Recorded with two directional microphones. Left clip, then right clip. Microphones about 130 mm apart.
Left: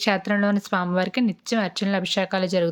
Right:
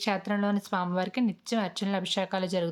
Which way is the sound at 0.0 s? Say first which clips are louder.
Left 7 dB; 25° left (ahead or behind).